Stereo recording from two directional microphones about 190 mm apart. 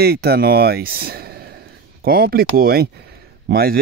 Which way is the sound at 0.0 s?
55° right (ahead or behind).